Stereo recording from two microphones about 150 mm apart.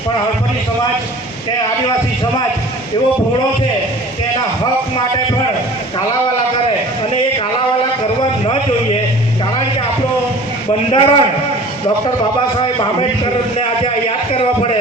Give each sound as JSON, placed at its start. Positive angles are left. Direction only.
{"t": 10.7, "sound": "a man's voice", "side_deg": 35}
{"t": 12.5, "sound": "a man's voice", "side_deg": 35}